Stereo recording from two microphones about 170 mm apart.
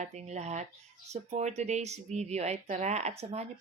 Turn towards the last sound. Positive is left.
turn(degrees=-40)  # may be behind; listen again after turning